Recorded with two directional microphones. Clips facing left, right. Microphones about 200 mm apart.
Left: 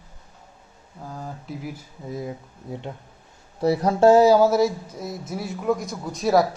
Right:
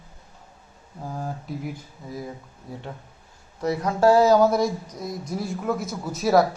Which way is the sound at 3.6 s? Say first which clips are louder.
Left 3 dB; 30° left (ahead or behind).